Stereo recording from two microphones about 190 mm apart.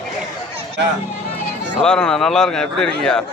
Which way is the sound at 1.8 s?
5° left (ahead or behind).